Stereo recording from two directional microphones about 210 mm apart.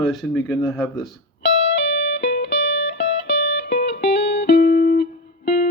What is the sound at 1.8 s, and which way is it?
Music, 55° left (ahead or behind).